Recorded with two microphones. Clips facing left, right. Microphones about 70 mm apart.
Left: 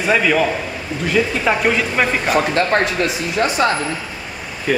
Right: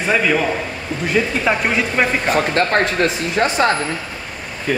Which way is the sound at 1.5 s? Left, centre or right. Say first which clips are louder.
Left 1 dB; centre.